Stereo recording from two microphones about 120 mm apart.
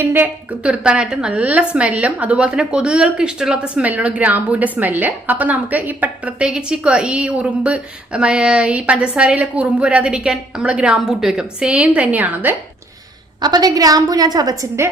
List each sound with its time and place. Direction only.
0.0 s a woman's voice: 15° right (ahead or behind)
13.4 s a woman's voice: 35° right (ahead or behind)